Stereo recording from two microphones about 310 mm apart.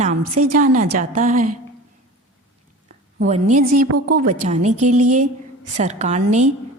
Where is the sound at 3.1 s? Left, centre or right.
Right.